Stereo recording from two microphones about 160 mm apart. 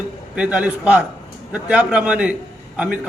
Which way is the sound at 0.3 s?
5° right (ahead or behind).